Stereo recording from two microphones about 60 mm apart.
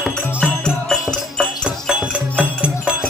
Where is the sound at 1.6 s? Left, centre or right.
Centre.